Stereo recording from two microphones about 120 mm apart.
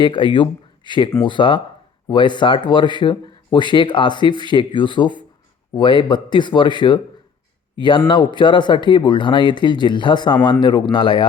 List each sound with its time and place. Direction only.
0.0 s speech: 40° left (ahead or behind)